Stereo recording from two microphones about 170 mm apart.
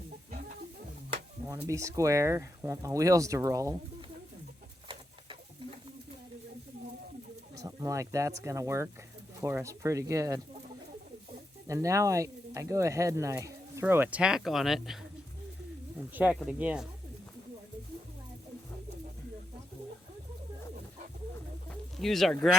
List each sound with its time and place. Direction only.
0.3 s music: 40° right (ahead or behind)
1.5 s speech: 15° right (ahead or behind)
7.5 s speech: 20° right (ahead or behind)
11.7 s speech: 20° right (ahead or behind); by 14.9 s centre (ahead or behind)
16.0 s speech: 10° right (ahead or behind)
21.9 s speech: centre (ahead or behind)